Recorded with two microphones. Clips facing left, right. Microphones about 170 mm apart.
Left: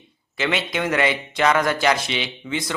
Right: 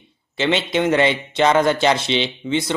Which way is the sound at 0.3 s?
25° right (ahead or behind).